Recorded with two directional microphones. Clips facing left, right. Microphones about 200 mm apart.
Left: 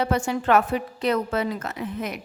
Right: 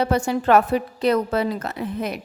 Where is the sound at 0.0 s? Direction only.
35° right (ahead or behind).